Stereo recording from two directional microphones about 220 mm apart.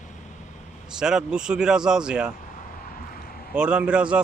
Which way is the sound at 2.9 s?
40° left (ahead or behind).